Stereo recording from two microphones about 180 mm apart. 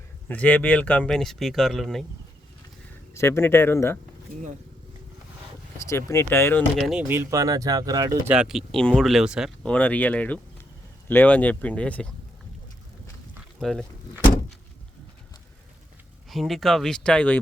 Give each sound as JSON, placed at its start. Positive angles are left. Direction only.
{"t": 0.3, "sound": "speech", "side_deg": 10}
{"t": 3.2, "sound": "speech", "side_deg": 15}
{"t": 5.9, "sound": "speech", "side_deg": 15}
{"t": 6.7, "sound": "speech", "side_deg": 0}
{"t": 7.1, "sound": "speech", "side_deg": -15}
{"t": 8.3, "sound": "speech", "side_deg": -5}
{"t": 13.6, "sound": "speech", "side_deg": 0}
{"t": 16.3, "sound": "speech", "side_deg": 0}